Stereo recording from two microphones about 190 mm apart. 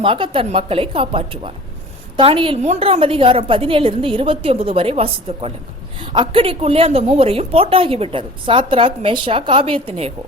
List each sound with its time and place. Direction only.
0.0 s a woman's voice: 30° right (ahead or behind)